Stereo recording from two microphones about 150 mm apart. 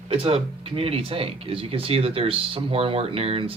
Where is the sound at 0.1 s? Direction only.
40° right (ahead or behind).